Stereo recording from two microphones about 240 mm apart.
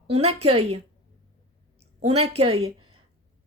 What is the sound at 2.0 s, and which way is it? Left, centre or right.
Speech, right.